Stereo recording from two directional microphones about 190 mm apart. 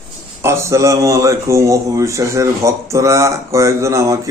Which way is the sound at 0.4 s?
15° right (ahead or behind).